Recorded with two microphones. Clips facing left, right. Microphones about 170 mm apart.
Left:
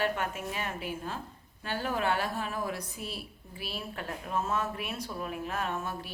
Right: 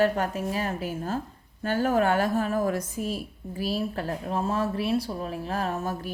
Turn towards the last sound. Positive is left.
turn(degrees=-40)  # may be behind; listen again after turning